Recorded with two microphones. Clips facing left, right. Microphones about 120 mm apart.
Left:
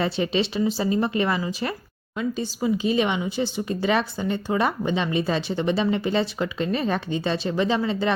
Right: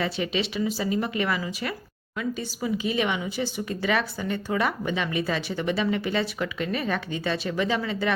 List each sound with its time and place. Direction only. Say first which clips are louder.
0.0 s speech: left 4 dB; 35° left (ahead or behind)